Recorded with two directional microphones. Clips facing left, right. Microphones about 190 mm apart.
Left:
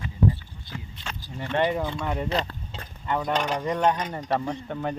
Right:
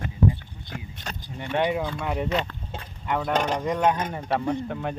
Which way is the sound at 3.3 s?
40° right (ahead or behind).